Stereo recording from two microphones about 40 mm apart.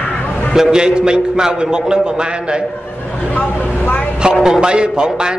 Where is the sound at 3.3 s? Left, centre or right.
Left.